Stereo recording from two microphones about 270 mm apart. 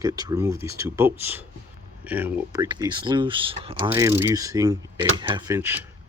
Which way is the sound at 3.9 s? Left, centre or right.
Centre.